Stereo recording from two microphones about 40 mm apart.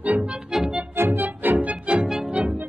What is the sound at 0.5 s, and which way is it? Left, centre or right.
Music, centre.